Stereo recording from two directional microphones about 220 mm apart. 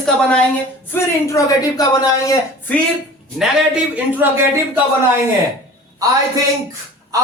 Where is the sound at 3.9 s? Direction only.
10° right (ahead or behind).